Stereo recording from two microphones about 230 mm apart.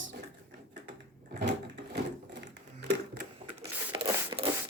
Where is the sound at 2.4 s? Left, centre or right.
Right.